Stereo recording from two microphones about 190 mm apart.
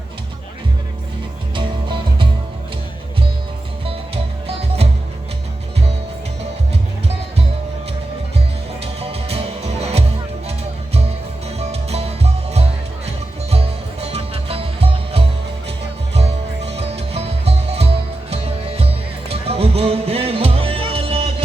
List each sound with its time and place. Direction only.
1.5 s music: 25° right (ahead or behind)
3.8 s music: 30° right (ahead or behind)
8.8 s music: 30° right (ahead or behind)
11.4 s music: 35° right (ahead or behind)
16.7 s music: 30° right (ahead or behind)